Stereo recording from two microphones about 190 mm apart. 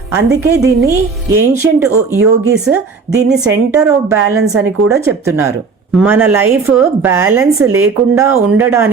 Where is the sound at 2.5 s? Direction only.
5° right (ahead or behind).